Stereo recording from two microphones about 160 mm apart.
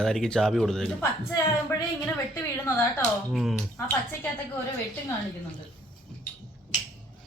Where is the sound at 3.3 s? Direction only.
Centre (ahead or behind).